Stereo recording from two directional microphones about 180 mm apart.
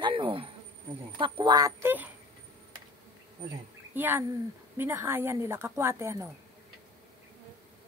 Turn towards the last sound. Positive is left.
turn(degrees=-15)  # may be behind; listen again after turning